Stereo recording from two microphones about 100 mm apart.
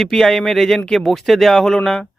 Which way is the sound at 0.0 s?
5° left (ahead or behind).